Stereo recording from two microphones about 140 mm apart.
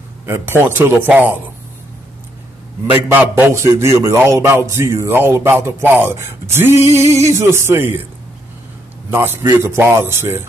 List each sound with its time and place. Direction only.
0.3 s speech: 15° right (ahead or behind)
2.9 s a man's voice: 15° right (ahead or behind)
9.1 s speech: 15° right (ahead or behind)